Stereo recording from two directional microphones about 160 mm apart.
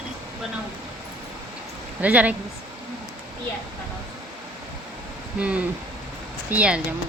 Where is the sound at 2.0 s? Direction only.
10° right (ahead or behind).